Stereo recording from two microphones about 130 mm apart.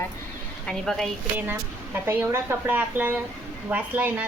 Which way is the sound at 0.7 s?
5° left (ahead or behind).